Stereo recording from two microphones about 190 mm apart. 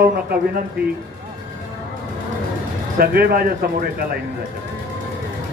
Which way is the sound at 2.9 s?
50° right (ahead or behind).